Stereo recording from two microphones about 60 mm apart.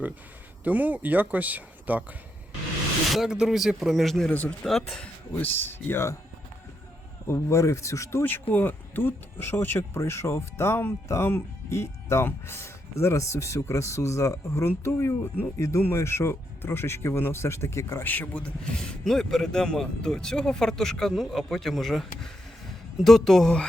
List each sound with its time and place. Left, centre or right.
0.6 s speech: right
3.1 s speech: centre
4.3 s speech: left
4.6 s speech: centre
5.3 s speech: left
7.3 s speech: left
8.2 s speech: left
10.0 s speech: left
18.0 s speech: left
18.3 s a man's voice: centre